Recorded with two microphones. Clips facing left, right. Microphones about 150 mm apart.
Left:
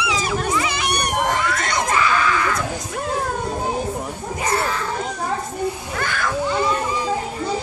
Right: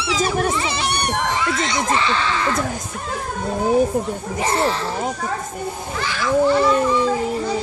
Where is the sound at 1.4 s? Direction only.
55° left (ahead or behind).